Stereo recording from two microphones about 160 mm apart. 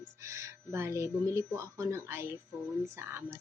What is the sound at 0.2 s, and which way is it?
A woman's voice, 20° right (ahead or behind).